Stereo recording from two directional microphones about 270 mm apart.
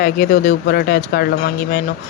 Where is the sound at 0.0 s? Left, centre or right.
Left.